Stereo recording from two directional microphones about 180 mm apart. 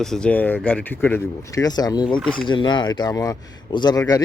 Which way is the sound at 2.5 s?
25° left (ahead or behind).